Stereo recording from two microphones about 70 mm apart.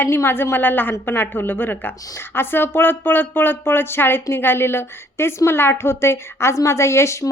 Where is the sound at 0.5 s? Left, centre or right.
Left.